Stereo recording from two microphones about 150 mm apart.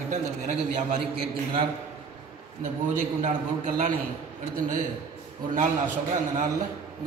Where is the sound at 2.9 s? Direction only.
50° right (ahead or behind).